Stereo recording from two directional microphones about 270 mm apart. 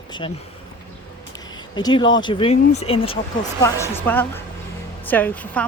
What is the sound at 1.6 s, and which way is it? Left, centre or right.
Speech, centre.